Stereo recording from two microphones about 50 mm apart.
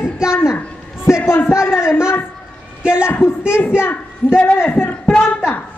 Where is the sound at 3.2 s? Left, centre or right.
Left.